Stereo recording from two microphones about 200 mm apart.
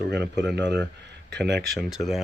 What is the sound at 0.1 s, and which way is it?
Speech, 55° right (ahead or behind).